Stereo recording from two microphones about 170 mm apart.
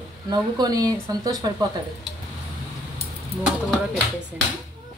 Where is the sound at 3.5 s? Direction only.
Centre (ahead or behind).